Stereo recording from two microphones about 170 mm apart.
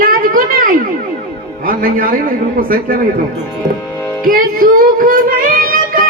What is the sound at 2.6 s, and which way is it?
Speech, 60° right (ahead or behind).